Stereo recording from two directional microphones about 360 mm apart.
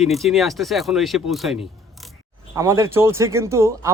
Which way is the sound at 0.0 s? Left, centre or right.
Centre.